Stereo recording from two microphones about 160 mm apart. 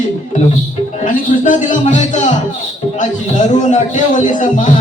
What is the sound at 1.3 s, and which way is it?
Speech, 55° left (ahead or behind).